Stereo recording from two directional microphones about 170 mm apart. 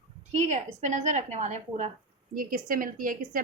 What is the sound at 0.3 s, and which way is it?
A woman's voice, 45° right (ahead or behind).